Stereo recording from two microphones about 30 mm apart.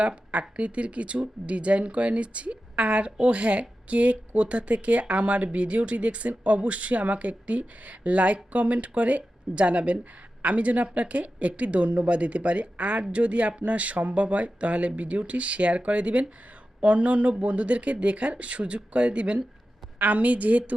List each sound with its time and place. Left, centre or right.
0.3 s speech: right
20.0 s a woman's voice: right